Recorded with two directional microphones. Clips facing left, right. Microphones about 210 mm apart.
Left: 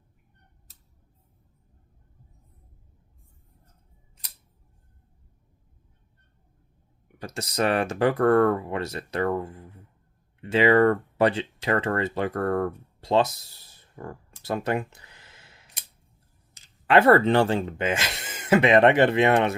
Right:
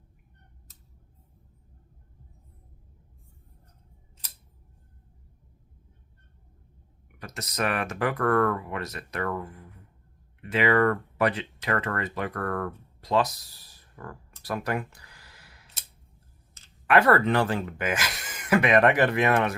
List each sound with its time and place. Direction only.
7.2 s speech: 30° left (ahead or behind)
14.4 s a sound: 25° left (ahead or behind)
16.8 s speech: 25° left (ahead or behind)